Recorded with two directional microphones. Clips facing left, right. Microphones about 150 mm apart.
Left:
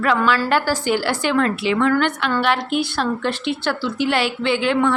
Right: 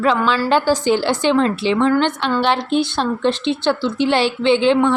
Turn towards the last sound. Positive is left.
turn(degrees=-25)  # may be behind; listen again after turning